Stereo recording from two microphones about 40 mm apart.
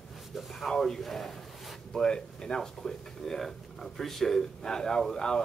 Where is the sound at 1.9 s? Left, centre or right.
Centre.